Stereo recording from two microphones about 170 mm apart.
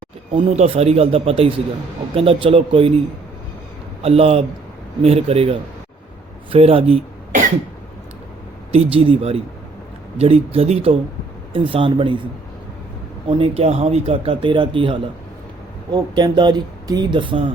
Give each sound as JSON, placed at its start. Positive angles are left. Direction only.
{"t": 0.3, "sound": "speech", "side_deg": -35}
{"t": 4.0, "sound": "speech", "side_deg": -35}
{"t": 8.7, "sound": "speech", "side_deg": -35}
{"t": 13.2, "sound": "speech", "side_deg": -35}